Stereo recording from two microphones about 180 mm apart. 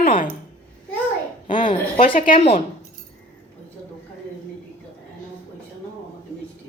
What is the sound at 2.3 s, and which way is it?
Speech, 30° left (ahead or behind).